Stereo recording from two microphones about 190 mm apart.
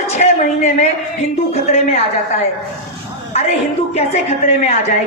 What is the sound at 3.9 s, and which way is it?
Speech, 35° left (ahead or behind).